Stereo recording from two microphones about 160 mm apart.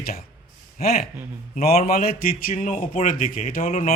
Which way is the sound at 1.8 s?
65° left (ahead or behind).